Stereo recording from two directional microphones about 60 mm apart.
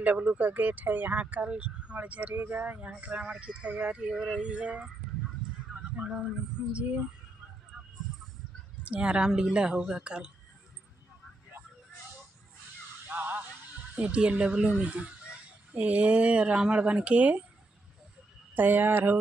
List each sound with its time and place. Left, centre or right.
0.0 s speech: right
6.0 s speech: centre
7.7 s a sound: centre
8.8 s speech: centre
13.1 s a sound: right
14.1 s speech: centre
18.5 s speech: right